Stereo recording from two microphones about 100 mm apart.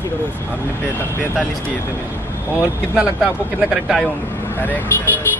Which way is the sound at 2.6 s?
10° right (ahead or behind).